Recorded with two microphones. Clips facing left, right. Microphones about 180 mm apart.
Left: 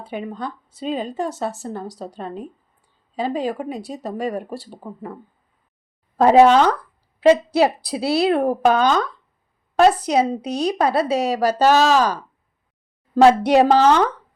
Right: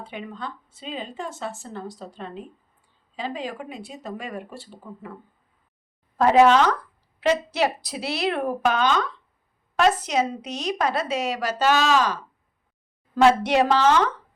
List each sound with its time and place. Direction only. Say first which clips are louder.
0.0 s speech: left 6 dB; 40° left (ahead or behind)
6.1 s speech: left 4 dB; 35° left (ahead or behind)